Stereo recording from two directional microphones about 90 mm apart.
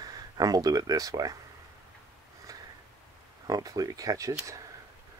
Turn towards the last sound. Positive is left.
turn(degrees=-40)  # may be behind; listen again after turning